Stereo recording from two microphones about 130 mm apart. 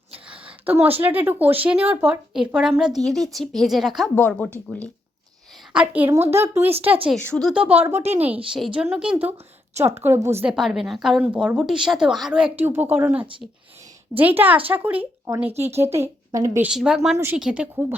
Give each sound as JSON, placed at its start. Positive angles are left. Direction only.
{"t": 0.9, "sound": "a woman's voice", "side_deg": -15}
{"t": 4.1, "sound": "speech", "side_deg": 10}
{"t": 5.7, "sound": "a woman's voice", "side_deg": -10}
{"t": 7.2, "sound": "speech", "side_deg": 10}
{"t": 7.5, "sound": "a woman's voice", "side_deg": -10}
{"t": 9.7, "sound": "a woman's voice", "side_deg": -20}
{"t": 10.4, "sound": "a woman's voice", "side_deg": -5}
{"t": 15.4, "sound": "speech", "side_deg": -55}
{"t": 15.7, "sound": "a woman's voice", "side_deg": -20}
{"t": 16.6, "sound": "a woman's voice", "side_deg": -5}